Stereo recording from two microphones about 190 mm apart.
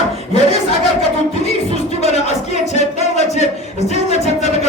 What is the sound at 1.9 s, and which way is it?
Music, 35° left (ahead or behind).